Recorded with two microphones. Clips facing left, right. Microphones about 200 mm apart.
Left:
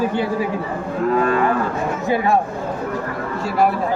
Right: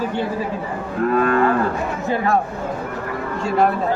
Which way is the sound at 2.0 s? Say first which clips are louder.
Left 2 dB; 15° left (ahead or behind).